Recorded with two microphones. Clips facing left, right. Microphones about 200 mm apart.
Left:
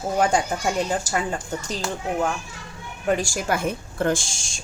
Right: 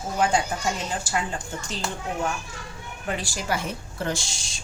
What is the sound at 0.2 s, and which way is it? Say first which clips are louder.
Speech: left 2 dB; 45° left (ahead or behind).